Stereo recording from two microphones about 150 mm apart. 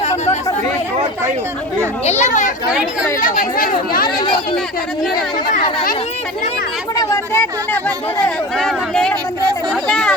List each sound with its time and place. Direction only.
2.0 s a child's voice: 50° left (ahead or behind)
3.2 s speech: 65° left (ahead or behind)
5.1 s speech: 70° left (ahead or behind)
6.9 s speech: 20° left (ahead or behind); by 10.1 s 5° left (ahead or behind)